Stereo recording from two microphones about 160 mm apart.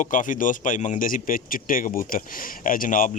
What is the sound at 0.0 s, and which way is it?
A man's voice, 55° left (ahead or behind).